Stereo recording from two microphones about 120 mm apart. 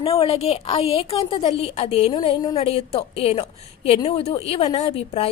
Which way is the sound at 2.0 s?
35° left (ahead or behind).